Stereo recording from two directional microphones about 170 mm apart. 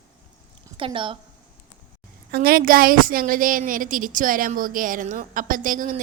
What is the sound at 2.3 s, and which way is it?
A woman's voice, 60° right (ahead or behind).